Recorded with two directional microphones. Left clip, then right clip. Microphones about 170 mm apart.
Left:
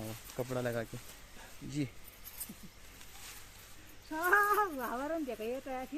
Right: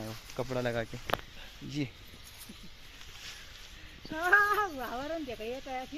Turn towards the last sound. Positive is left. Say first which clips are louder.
# right 1 dB
turn(degrees=5)  # may be behind; listen again after turning